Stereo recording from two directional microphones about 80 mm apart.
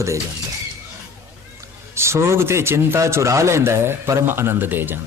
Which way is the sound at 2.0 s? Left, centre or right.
Right.